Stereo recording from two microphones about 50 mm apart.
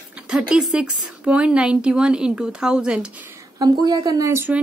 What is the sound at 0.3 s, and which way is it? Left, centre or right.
Speech, right.